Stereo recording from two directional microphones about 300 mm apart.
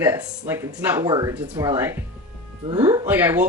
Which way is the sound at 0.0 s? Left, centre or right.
Centre.